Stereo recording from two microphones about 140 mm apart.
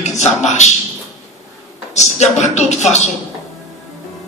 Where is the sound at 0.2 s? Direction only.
55° left (ahead or behind).